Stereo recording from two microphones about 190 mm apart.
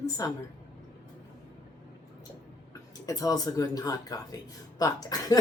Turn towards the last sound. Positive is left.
turn(degrees=20)  # may be behind; listen again after turning